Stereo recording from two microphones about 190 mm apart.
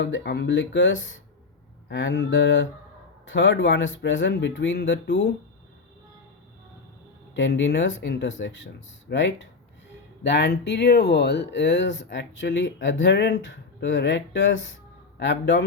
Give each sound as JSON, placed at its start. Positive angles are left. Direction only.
{"t": 0.0, "sound": "speech", "side_deg": 70}
{"t": 7.3, "sound": "speech", "side_deg": 75}